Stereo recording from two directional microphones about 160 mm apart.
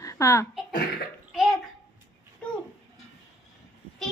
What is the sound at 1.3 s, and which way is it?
Bathtub, centre (ahead or behind).